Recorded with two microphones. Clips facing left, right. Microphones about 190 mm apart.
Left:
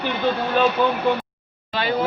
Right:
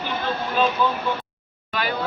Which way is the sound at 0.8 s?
55° left (ahead or behind).